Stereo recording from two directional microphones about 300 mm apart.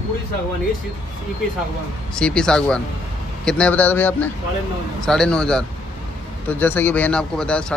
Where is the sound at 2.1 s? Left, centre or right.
Centre.